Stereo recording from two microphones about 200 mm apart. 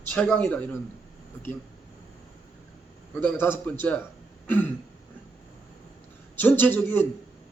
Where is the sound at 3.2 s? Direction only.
10° left (ahead or behind).